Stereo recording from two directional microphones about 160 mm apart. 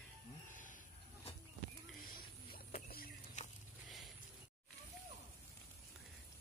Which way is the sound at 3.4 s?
45° left (ahead or behind).